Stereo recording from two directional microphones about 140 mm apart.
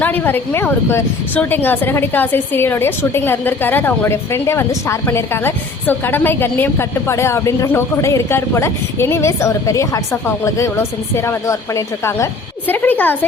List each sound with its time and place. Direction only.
0.0 s a woman's voice: 15° left (ahead or behind)